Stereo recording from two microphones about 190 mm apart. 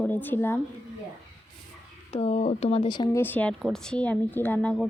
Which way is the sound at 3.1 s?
10° left (ahead or behind).